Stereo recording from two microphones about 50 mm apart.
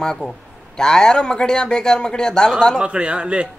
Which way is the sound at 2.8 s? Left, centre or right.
Right.